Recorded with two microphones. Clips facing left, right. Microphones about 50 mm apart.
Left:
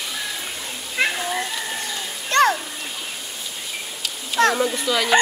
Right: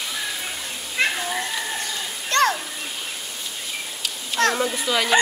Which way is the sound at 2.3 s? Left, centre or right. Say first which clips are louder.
Left 3 dB; centre.